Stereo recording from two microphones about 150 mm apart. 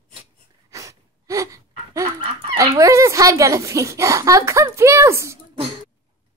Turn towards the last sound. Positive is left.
turn(degrees=-20)  # may be behind; listen again after turning